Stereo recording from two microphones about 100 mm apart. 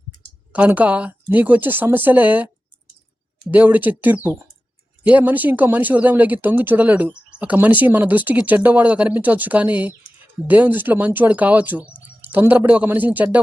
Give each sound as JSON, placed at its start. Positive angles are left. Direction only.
{"t": 0.5, "sound": "speech", "side_deg": -15}
{"t": 3.5, "sound": "speech", "side_deg": -15}